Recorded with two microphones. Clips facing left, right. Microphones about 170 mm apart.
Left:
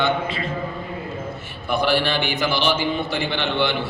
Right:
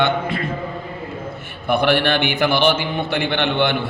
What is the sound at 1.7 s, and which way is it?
A man's voice, 60° right (ahead or behind).